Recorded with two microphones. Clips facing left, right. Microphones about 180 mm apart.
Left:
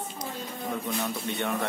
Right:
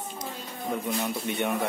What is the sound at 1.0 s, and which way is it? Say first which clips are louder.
Speech: right 2 dB; 15° right (ahead or behind).